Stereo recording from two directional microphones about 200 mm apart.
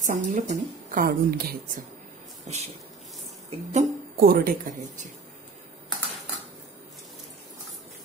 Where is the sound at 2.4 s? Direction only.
35° right (ahead or behind).